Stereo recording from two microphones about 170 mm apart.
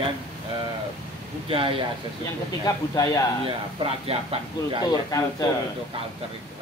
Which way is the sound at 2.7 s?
20° left (ahead or behind).